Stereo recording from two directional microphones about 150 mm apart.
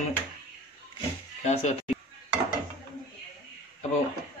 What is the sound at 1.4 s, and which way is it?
Music, 50° left (ahead or behind).